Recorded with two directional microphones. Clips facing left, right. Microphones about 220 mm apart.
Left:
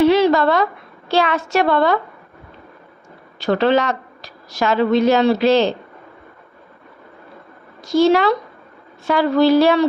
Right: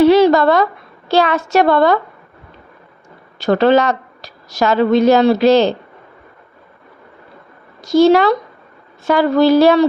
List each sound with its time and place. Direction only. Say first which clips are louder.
0.0 s a sound: right 4 dB; 40° right (ahead or behind)
1.0 s a woman's voice: right 3 dB; 40° right (ahead or behind)
3.4 s a woman's voice: right 4 dB; 45° right (ahead or behind)
7.9 s a woman's voice: right 4 dB; 40° right (ahead or behind)